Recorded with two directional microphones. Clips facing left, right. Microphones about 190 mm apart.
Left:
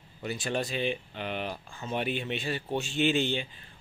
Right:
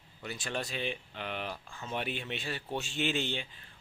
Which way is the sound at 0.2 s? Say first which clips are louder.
Left 6 dB; 5° left (ahead or behind).